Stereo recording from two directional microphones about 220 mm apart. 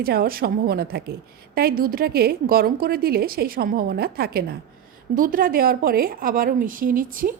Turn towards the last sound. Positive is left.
turn(degrees=-40)  # may be behind; listen again after turning